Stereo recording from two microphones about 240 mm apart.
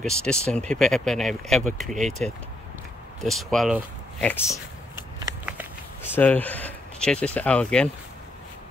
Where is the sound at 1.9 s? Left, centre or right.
Right.